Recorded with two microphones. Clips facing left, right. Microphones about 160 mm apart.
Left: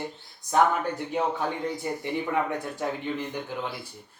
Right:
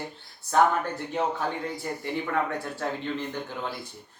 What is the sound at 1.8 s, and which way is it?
Speech, 15° left (ahead or behind).